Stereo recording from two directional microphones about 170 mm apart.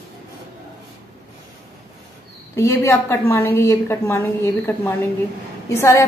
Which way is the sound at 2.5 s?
20° left (ahead or behind).